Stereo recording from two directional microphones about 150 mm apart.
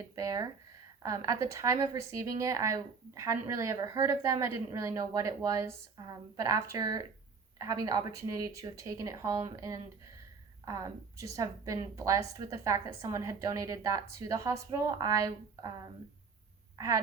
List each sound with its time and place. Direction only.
0.2 s speech: 25° right (ahead or behind)
16.7 s speech: 20° right (ahead or behind)